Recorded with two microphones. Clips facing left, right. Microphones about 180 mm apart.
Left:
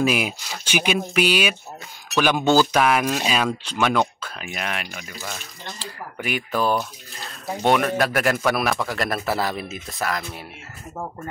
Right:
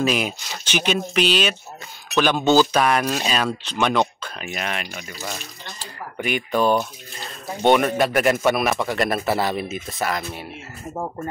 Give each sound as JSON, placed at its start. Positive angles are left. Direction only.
{"t": 0.0, "sound": "speech", "side_deg": 10}
{"t": 6.1, "sound": "speech", "side_deg": 5}
{"t": 6.8, "sound": "speech", "side_deg": -10}